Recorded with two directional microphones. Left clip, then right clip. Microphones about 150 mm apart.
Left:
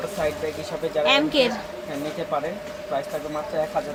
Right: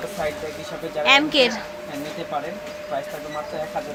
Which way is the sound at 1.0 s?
5° right (ahead or behind).